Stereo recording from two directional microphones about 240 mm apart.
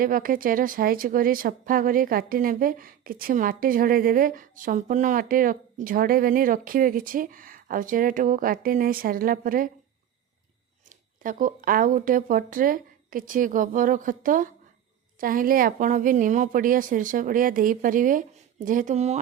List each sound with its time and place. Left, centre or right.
0.0 s speech: right
10.8 s speech: right